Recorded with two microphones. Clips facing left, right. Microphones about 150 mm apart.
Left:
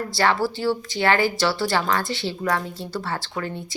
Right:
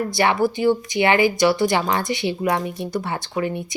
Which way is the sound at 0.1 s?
20° right (ahead or behind).